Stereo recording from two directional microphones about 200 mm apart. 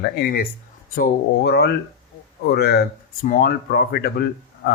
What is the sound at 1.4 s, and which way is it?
Speech, 55° left (ahead or behind).